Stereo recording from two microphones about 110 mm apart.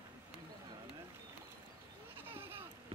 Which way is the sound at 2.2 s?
20° right (ahead or behind).